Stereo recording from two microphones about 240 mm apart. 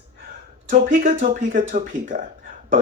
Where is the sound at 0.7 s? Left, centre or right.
Right.